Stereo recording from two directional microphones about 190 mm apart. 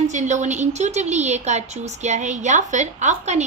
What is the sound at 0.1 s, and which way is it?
A woman's voice, 40° right (ahead or behind).